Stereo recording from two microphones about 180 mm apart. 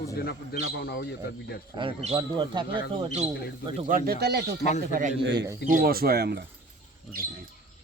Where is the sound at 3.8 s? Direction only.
50° right (ahead or behind).